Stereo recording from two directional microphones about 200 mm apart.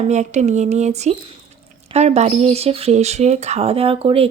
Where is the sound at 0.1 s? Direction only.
35° right (ahead or behind).